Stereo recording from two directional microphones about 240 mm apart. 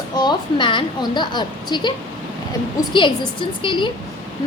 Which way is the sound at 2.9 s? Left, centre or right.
Centre.